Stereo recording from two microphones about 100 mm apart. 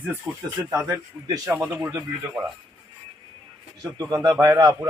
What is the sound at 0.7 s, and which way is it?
A man's voice, 35° right (ahead or behind).